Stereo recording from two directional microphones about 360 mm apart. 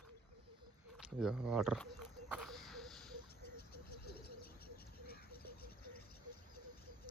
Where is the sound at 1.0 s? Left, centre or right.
Centre.